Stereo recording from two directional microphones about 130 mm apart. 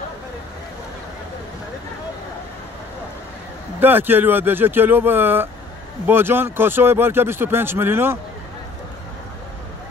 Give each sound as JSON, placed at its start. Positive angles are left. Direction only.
{"t": 3.8, "sound": "a man's voice", "side_deg": -15}